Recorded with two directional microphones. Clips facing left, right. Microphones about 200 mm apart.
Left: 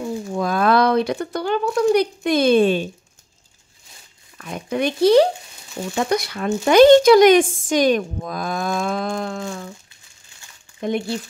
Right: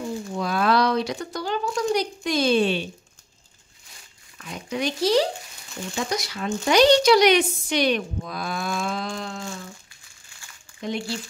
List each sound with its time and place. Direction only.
0.3 s speech: 50° left (ahead or behind)
4.5 s speech: 55° left (ahead or behind)
10.8 s speech: 55° left (ahead or behind)